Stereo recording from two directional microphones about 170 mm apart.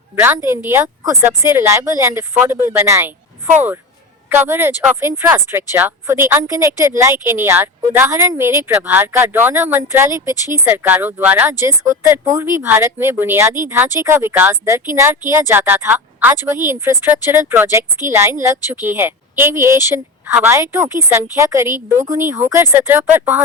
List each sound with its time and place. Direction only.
0.3 s a woman's voice: 15° right (ahead or behind)